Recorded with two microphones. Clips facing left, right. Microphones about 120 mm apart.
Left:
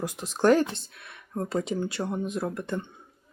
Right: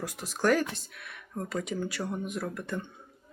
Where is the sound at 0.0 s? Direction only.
20° left (ahead or behind).